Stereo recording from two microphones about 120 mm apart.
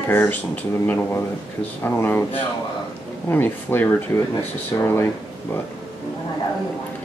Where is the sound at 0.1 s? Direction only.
15° left (ahead or behind).